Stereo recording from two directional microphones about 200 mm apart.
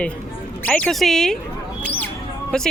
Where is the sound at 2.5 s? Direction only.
5° left (ahead or behind).